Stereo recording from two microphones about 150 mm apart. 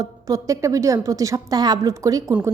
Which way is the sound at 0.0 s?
20° right (ahead or behind).